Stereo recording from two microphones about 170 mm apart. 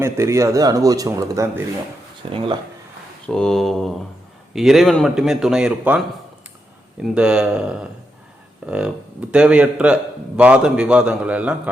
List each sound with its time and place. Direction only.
0.0 s speech: 15° right (ahead or behind)
2.3 s speech: 30° right (ahead or behind)
3.2 s speech: 5° left (ahead or behind)